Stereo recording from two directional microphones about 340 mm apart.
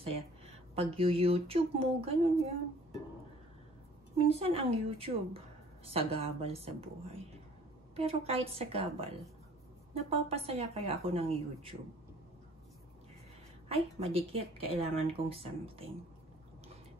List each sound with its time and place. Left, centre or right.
0.0 s speech: centre
4.3 s speech: centre
7.9 s speech: centre
13.7 s speech: centre